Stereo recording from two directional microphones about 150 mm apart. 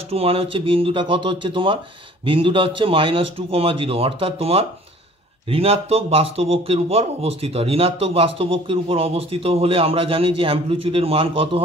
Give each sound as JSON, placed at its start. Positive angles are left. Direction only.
{"t": 0.1, "sound": "speech", "side_deg": -40}